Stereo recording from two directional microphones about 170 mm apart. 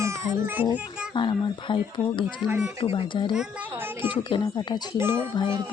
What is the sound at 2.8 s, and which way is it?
Speech, 35° left (ahead or behind).